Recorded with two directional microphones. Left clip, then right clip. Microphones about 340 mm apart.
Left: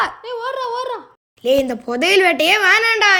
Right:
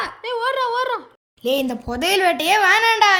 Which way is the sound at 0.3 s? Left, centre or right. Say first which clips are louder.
Right 2 dB; centre.